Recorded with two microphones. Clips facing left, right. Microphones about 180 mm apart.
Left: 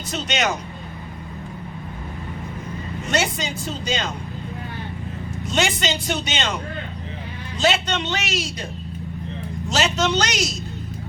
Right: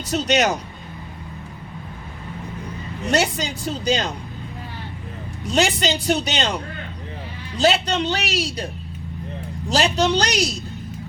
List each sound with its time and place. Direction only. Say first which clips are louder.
0.1 s a man's voice: right 5 dB; 40° right (ahead or behind)
3.1 s a man's voice: right 3 dB; 35° right (ahead or behind)
5.5 s a man's voice: right 3 dB; 35° right (ahead or behind)
9.6 s a man's voice: right 3 dB; 35° right (ahead or behind)